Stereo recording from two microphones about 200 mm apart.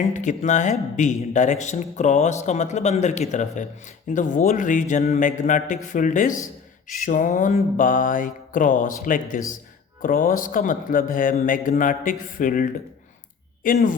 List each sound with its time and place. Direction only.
0.1 s speech: 40° left (ahead or behind)
13.7 s speech: 40° left (ahead or behind)